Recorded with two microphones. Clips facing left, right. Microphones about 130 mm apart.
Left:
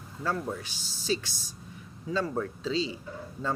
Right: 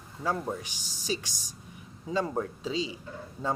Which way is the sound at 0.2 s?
15° right (ahead or behind).